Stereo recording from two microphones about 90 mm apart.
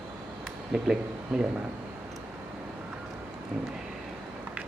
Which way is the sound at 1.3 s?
10° right (ahead or behind).